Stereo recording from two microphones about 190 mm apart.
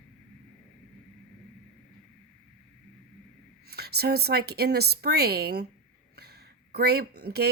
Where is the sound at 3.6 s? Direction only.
55° right (ahead or behind).